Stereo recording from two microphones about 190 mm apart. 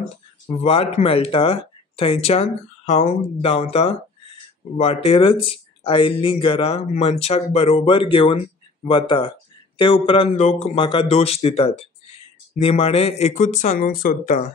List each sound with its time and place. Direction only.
0.6 s speech: 30° left (ahead or behind)